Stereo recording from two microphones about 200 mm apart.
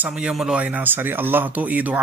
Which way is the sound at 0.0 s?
5° right (ahead or behind).